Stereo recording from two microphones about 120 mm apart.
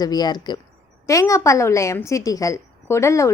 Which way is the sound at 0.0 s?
35° left (ahead or behind).